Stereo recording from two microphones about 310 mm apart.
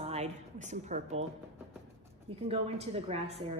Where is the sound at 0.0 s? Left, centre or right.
Right.